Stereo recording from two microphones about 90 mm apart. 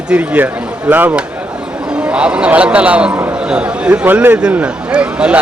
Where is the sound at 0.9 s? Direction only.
20° right (ahead or behind).